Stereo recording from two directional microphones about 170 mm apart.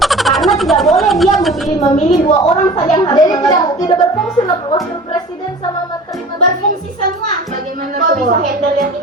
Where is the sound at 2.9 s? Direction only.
25° left (ahead or behind).